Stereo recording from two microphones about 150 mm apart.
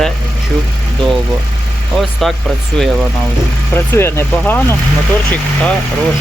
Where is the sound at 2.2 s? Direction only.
Centre (ahead or behind).